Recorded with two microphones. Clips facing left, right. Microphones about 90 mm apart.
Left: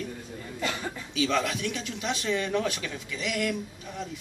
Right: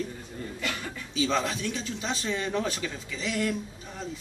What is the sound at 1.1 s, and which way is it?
A man's voice, 30° right (ahead or behind).